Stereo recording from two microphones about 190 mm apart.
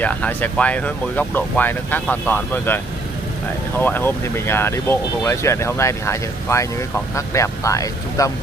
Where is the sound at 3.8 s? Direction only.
10° left (ahead or behind).